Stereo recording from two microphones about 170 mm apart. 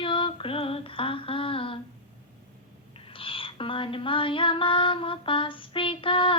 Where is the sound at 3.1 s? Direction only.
30° left (ahead or behind).